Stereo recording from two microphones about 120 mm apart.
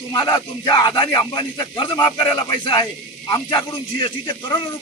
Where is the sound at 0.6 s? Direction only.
40° left (ahead or behind).